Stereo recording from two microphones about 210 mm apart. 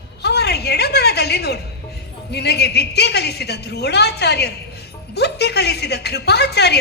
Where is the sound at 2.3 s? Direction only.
50° left (ahead or behind).